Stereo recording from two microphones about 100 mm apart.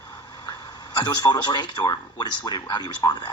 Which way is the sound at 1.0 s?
45° left (ahead or behind).